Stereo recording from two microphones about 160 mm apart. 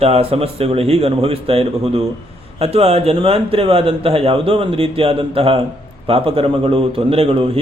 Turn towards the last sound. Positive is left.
turn(degrees=-35)  # may be behind; listen again after turning